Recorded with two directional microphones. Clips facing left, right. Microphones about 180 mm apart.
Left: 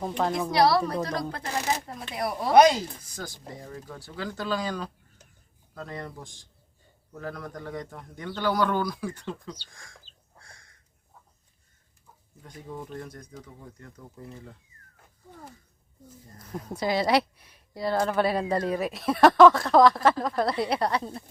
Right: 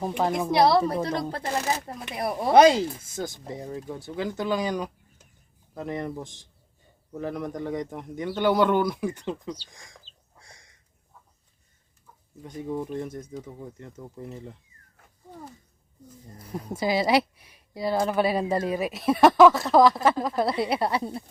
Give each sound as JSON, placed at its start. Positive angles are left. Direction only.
{"t": 0.0, "sound": "speech", "side_deg": -15}
{"t": 10.4, "sound": "a sound", "side_deg": -20}
{"t": 12.4, "sound": "speech", "side_deg": -20}
{"t": 16.8, "sound": "speech", "side_deg": -5}